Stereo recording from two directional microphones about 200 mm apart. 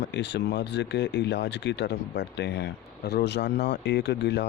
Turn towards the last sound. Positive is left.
turn(degrees=60)  # may be behind; listen again after turning